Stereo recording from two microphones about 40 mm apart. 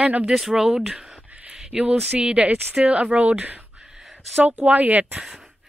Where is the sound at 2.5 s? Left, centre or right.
Right.